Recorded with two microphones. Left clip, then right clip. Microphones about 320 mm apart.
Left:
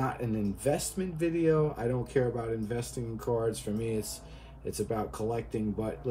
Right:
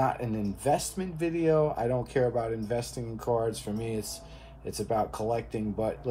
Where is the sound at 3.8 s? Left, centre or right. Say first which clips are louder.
Even; right.